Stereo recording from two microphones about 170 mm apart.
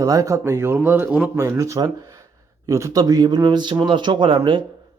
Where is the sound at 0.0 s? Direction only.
20° right (ahead or behind).